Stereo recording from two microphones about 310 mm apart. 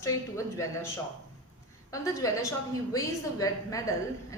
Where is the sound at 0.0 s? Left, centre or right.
Centre.